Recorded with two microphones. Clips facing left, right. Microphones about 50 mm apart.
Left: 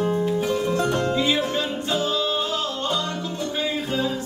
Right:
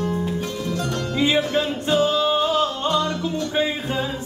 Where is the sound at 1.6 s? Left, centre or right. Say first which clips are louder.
Right 5 dB; right.